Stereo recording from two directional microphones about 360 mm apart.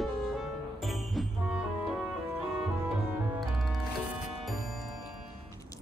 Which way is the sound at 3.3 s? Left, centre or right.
Centre.